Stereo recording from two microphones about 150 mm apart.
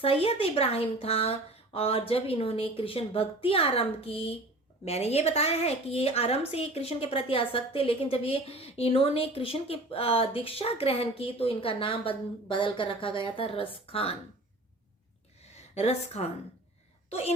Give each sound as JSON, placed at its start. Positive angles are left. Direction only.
{"t": 0.0, "sound": "a woman's voice", "side_deg": 40}
{"t": 15.4, "sound": "a sound", "side_deg": 45}
{"t": 17.1, "sound": "speech", "side_deg": 45}